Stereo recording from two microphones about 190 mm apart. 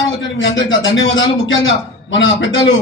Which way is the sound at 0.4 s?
75° left (ahead or behind).